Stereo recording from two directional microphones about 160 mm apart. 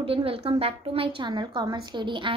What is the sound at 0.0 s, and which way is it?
A woman's voice, 35° right (ahead or behind).